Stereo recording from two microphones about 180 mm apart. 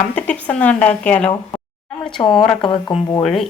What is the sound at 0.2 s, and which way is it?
Speech, 5° left (ahead or behind).